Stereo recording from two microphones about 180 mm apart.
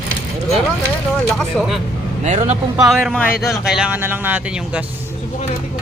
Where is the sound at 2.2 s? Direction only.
40° right (ahead or behind).